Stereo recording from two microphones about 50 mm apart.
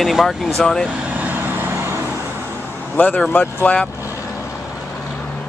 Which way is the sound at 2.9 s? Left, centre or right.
Left.